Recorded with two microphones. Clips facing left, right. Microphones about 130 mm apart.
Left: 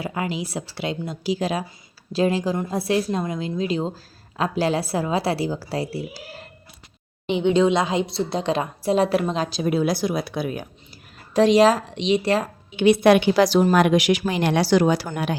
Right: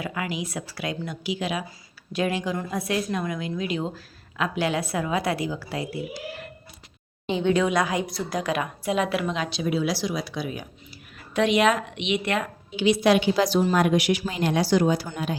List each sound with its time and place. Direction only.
0.0 s a woman's voice: 30° left (ahead or behind)
7.3 s a woman's voice: 20° left (ahead or behind); by 10.7 s 50° left (ahead or behind)
11.3 s a woman's voice: 35° left (ahead or behind)
12.7 s a woman's voice: 55° left (ahead or behind); by 14.2 s 90° left
14.2 s speech: 70° left (ahead or behind)